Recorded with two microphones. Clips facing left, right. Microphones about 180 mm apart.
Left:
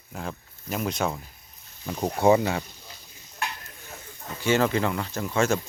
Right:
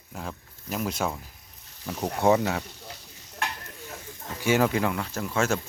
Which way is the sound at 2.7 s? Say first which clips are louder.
Right 5 dB; 70° right (ahead or behind).